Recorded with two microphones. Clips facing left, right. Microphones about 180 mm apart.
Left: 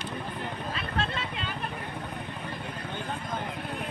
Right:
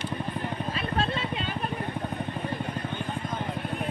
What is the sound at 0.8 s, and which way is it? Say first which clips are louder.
Vehicle: right 4 dB; 25° right (ahead or behind).